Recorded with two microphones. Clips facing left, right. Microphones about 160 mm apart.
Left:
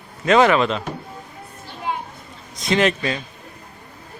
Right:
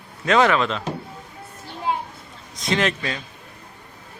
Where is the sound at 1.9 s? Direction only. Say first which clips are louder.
Right 2 dB; 30° right (ahead or behind).